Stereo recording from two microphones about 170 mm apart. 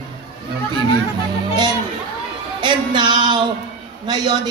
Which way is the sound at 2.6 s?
25° right (ahead or behind).